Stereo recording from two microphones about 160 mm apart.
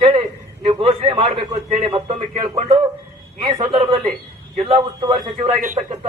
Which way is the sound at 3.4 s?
35° right (ahead or behind).